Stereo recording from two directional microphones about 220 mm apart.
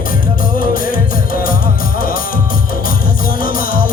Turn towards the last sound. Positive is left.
turn(degrees=40)  # may be behind; listen again after turning